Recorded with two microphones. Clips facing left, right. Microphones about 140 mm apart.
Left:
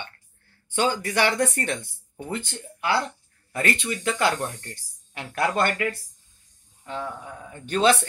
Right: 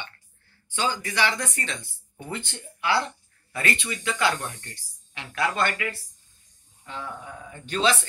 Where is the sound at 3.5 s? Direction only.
45° left (ahead or behind).